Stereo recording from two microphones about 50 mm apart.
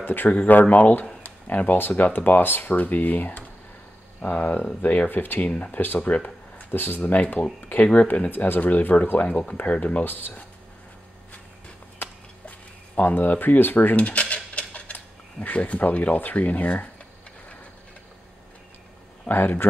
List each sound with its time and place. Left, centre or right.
0.0 s speech: left
6.2 s a sound: left
7.1 s speech: left
7.7 s speech: left
8.3 s speech: left
9.6 s speech: left
10.0 s speech: left
12.0 s a sound: left
13.9 s a sound: left
15.4 s speech: left
19.2 s speech: left